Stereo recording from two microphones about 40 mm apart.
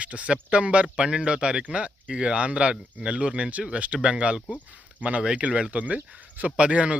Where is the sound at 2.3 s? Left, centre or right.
Right.